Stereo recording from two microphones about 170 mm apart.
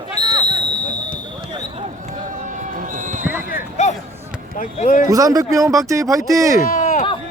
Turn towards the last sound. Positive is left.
turn(degrees=45)  # may be behind; listen again after turning